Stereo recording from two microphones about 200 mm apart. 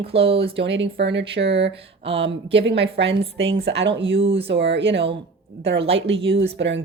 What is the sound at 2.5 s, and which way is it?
Speech, 60° right (ahead or behind).